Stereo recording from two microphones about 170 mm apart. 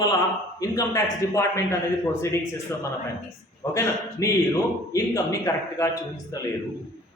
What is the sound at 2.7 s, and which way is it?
A man's voice, 15° left (ahead or behind).